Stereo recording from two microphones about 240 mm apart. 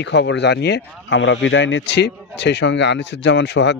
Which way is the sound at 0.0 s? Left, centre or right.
Left.